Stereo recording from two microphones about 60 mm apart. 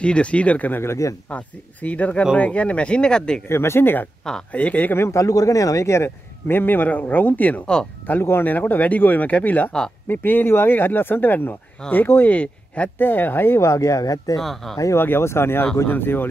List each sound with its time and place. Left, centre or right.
0.0 s speech: centre
0.8 s a man's voice: left
1.3 s speech: left
3.4 s speech: left
4.9 s a man's voice: left
6.4 s speech: left
7.6 s speech: centre
8.1 s speech: left
12.4 s speech: left
13.0 s speech: left
13.6 s speech: left
14.4 s speech: centre
15.0 s speech: left